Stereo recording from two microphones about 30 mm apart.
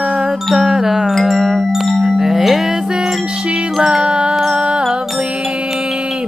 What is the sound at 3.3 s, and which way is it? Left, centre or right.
Music, right.